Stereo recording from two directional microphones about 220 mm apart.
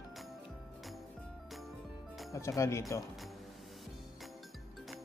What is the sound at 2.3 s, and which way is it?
Speech, 15° left (ahead or behind).